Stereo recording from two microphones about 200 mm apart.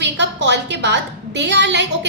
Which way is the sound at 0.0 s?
60° right (ahead or behind).